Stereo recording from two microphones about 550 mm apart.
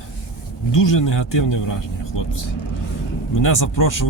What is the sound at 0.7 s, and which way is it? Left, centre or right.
Speech, left.